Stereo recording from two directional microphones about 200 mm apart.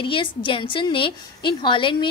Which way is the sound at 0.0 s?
25° left (ahead or behind).